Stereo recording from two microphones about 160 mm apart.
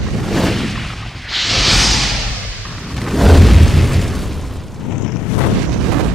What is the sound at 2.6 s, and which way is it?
Boom, centre (ahead or behind).